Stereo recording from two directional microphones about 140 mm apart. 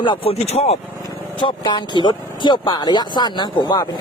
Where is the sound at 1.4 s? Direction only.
35° left (ahead or behind).